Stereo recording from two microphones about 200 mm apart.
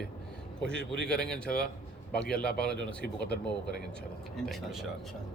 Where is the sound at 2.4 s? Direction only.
50° left (ahead or behind).